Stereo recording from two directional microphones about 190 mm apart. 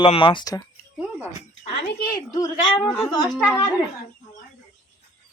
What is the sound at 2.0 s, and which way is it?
Speech, 50° left (ahead or behind).